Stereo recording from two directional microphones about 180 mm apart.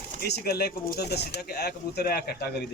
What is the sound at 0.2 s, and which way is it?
A man's voice, 65° left (ahead or behind).